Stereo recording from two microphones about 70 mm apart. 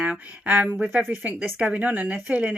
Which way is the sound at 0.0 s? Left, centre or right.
Centre.